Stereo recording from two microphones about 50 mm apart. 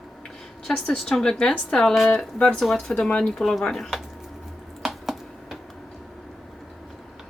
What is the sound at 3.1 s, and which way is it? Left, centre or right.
Speech, left.